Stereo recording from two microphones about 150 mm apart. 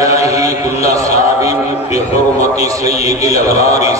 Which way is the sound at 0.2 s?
20° right (ahead or behind).